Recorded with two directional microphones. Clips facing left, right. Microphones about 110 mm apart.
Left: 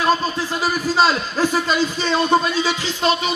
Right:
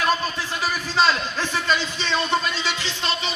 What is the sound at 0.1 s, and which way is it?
A man's voice, 40° left (ahead or behind).